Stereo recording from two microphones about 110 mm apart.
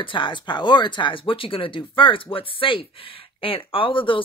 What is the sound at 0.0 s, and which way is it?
Speech, 45° left (ahead or behind).